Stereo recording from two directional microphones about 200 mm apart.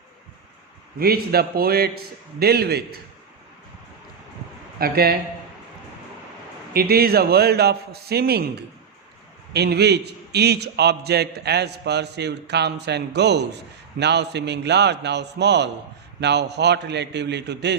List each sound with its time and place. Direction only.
0.9 s a man's voice: 50° right (ahead or behind)
4.8 s a man's voice: 50° right (ahead or behind)
6.7 s a man's voice: 50° right (ahead or behind)